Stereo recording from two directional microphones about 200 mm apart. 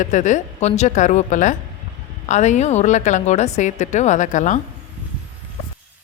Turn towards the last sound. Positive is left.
turn(degrees=40)  # may be behind; listen again after turning